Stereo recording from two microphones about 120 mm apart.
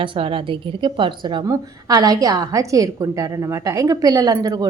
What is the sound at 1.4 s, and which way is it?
A woman's voice, 30° right (ahead or behind).